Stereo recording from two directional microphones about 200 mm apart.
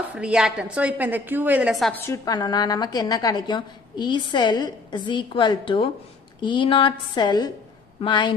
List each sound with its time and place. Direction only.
0.1 s a woman's voice: 5° right (ahead or behind)
2.0 s a woman's voice: 15° left (ahead or behind)